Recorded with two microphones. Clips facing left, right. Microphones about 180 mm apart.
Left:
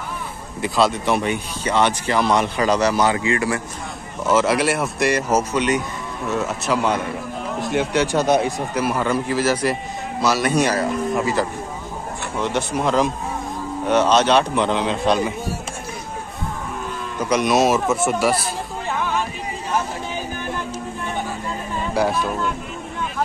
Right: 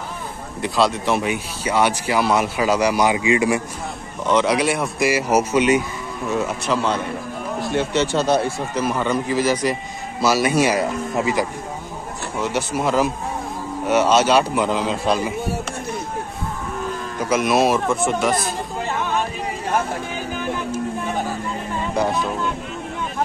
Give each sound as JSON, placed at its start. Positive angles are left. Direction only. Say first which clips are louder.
{"t": 0.6, "sound": "speech", "louder": "even", "side_deg": 0}
{"t": 4.3, "sound": "a man's voice", "louder": "even", "side_deg": 5}
{"t": 10.2, "sound": "speech", "louder": "right 1 dB", "side_deg": -5}
{"t": 17.2, "sound": "speech", "louder": "even", "side_deg": -5}